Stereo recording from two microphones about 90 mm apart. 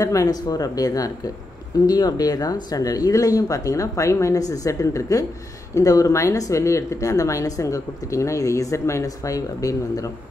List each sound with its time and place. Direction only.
0.0 s speech: 40° left (ahead or behind)